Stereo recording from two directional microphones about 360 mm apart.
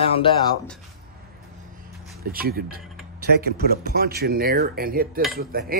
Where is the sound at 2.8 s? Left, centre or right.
Centre.